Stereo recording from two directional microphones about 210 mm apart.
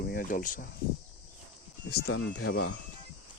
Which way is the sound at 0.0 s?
45° left (ahead or behind).